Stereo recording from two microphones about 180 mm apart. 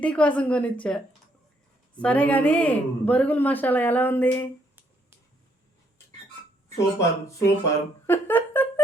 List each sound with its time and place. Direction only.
0.0 s a woman's voice: 5° left (ahead or behind)
6.7 s a woman's voice: 15° left (ahead or behind)
8.0 s a sound: 10° left (ahead or behind)